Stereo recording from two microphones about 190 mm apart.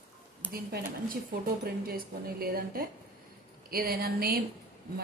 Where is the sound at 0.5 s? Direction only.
50° right (ahead or behind).